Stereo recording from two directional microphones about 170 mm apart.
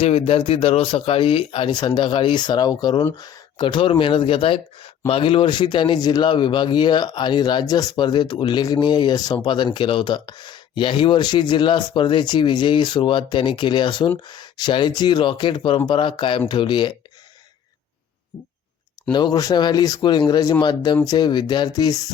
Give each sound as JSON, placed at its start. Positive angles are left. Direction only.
{"t": 0.0, "sound": "speech", "side_deg": 35}
{"t": 19.1, "sound": "speech", "side_deg": 25}